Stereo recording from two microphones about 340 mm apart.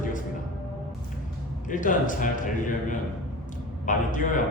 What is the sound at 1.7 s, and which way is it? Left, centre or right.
A man's voice, left.